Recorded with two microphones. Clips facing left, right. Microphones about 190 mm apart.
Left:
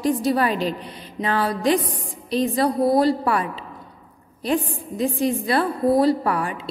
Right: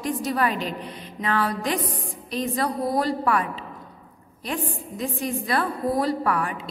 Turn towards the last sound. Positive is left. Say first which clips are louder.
# left 1 dB
turn(degrees=30)  # may be behind; listen again after turning